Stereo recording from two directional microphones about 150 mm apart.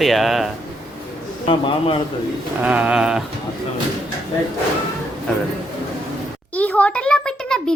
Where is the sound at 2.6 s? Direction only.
10° right (ahead or behind).